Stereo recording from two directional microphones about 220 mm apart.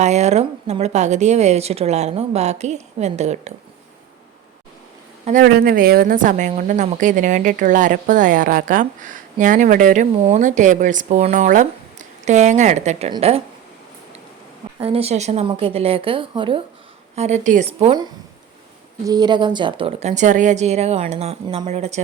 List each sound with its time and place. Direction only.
0.0 s a woman's voice: 30° right (ahead or behind)
5.2 s speech: 35° right (ahead or behind)
5.5 s a woman's voice: 45° right (ahead or behind); by 13.4 s 25° right (ahead or behind)
14.8 s a woman's voice: 25° right (ahead or behind)